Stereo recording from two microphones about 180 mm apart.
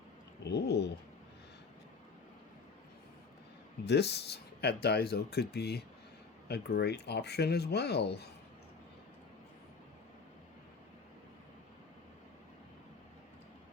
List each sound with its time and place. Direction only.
0.4 s cat: 70° left (ahead or behind)
3.8 s speech: 65° left (ahead or behind)